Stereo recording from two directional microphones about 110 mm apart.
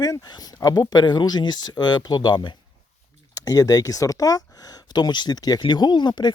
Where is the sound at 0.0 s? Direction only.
35° left (ahead or behind).